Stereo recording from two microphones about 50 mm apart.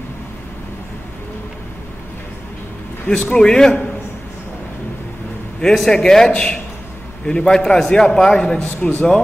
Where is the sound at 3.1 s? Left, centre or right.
Left.